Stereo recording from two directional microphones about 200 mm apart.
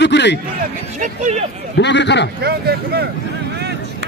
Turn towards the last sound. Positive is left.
turn(degrees=-55)  # may be behind; listen again after turning